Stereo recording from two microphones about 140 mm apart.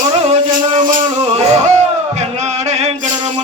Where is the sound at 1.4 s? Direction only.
55° right (ahead or behind).